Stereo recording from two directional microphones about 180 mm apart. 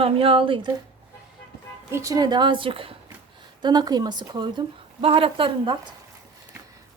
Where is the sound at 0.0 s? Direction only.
30° right (ahead or behind).